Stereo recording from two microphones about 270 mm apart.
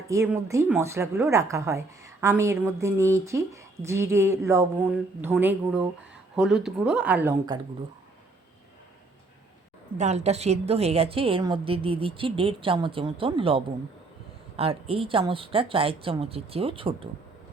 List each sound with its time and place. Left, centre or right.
0.1 s a woman's voice: centre
10.0 s a woman's voice: right